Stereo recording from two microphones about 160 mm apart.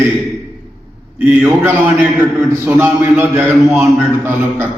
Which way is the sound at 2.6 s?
10° right (ahead or behind).